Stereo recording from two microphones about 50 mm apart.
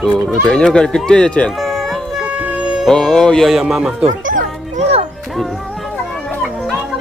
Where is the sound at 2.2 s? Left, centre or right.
Right.